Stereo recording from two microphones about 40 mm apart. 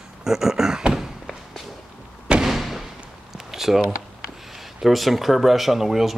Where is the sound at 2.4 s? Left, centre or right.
Centre.